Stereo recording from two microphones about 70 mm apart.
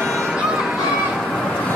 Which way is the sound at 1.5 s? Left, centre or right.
Left.